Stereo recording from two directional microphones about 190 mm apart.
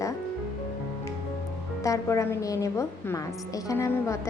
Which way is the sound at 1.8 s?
15° left (ahead or behind).